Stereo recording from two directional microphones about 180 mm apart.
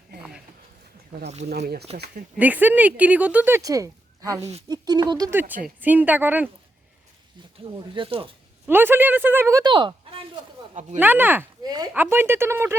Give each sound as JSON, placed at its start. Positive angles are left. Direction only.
{"t": 1.5, "sound": "speech", "side_deg": -60}
{"t": 2.4, "sound": "speech", "side_deg": -10}
{"t": 4.4, "sound": "speech", "side_deg": -35}
{"t": 4.7, "sound": "speech", "side_deg": -20}
{"t": 7.9, "sound": "speech", "side_deg": -30}
{"t": 8.6, "sound": "speech", "side_deg": -10}
{"t": 11.0, "sound": "speech", "side_deg": -10}
{"t": 11.6, "sound": "speech", "side_deg": -20}